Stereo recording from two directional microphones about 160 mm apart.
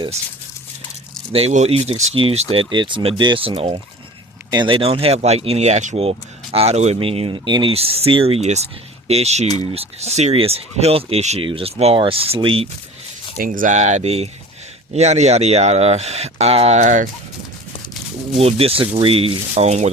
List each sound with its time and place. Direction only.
1.3 s speech: 40° right (ahead or behind)
13.4 s speech: 60° right (ahead or behind)
18.3 s speech: 40° right (ahead or behind)